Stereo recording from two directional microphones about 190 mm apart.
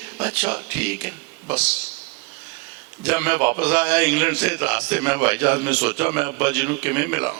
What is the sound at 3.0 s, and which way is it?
A man's voice, 10° right (ahead or behind).